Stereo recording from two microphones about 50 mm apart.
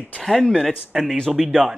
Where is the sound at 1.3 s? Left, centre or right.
Centre.